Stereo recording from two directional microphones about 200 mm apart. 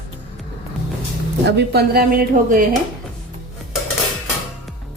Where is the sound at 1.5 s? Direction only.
55° right (ahead or behind).